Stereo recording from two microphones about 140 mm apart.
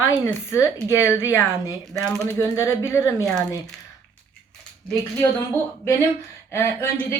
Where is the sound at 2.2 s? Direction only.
20° left (ahead or behind).